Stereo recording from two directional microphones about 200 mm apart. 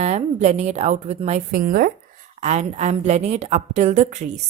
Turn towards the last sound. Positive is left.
turn(degrees=-35)  # may be behind; listen again after turning